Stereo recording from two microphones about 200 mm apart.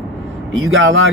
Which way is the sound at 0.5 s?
80° right.